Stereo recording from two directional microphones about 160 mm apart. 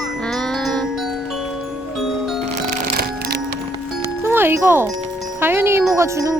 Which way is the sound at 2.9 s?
70° right (ahead or behind).